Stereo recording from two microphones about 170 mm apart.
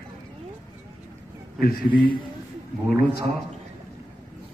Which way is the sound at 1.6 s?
60° left (ahead or behind).